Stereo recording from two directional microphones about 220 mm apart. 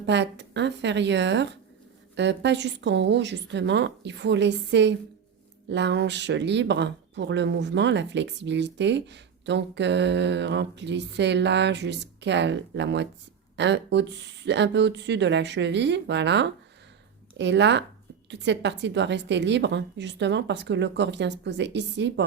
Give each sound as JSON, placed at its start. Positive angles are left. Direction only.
{"t": 0.0, "sound": "speech", "side_deg": -50}